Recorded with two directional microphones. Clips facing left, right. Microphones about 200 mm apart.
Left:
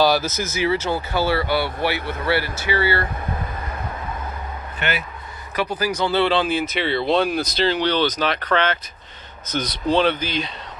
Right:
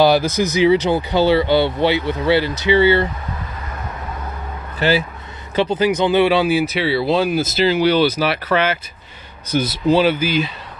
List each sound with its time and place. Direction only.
0.0 s speech: 15° right (ahead or behind)
4.7 s speech: 30° right (ahead or behind); by 10.5 s 5° right (ahead or behind)